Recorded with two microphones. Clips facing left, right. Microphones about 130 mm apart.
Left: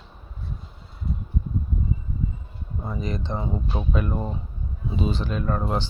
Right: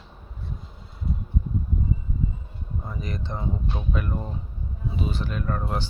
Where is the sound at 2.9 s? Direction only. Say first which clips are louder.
Left 5 dB; 25° left (ahead or behind).